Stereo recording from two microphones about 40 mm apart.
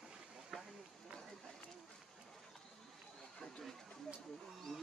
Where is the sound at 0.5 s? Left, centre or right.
Centre.